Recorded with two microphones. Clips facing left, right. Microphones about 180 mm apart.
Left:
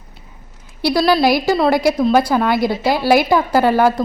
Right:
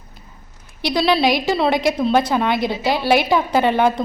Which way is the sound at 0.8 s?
5° left (ahead or behind).